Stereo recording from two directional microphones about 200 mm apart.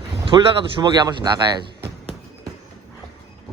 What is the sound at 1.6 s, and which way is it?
Music, 55° right (ahead or behind).